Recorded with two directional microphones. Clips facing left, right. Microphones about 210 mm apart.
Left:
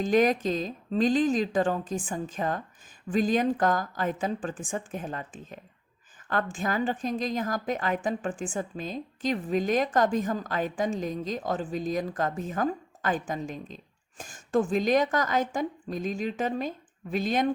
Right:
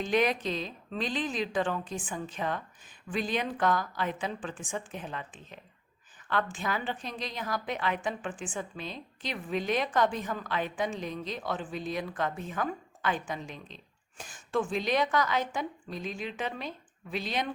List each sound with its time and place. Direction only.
0.0 s a woman's voice: 45° left (ahead or behind)